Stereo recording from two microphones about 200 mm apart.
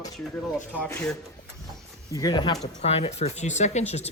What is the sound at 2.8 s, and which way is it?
Speech, 30° left (ahead or behind).